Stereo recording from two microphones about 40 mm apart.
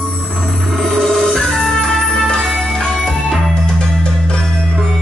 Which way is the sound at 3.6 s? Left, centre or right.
Left.